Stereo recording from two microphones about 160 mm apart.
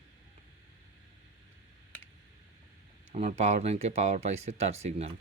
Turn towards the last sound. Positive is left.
turn(degrees=-45)  # may be behind; listen again after turning